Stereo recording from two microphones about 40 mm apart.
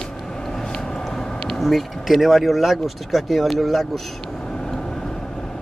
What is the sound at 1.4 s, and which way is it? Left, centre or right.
Speech, centre.